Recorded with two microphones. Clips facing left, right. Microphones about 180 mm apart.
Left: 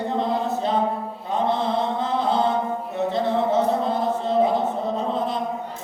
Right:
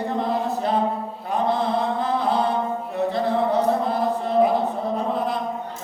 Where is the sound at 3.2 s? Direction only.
25° left (ahead or behind).